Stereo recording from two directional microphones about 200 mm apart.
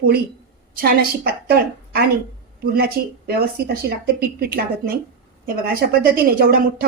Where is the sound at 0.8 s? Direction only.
50° right (ahead or behind).